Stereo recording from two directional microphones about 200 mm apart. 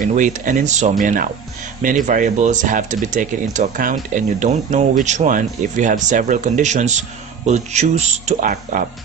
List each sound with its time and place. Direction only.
0.0 s speech: 40° right (ahead or behind)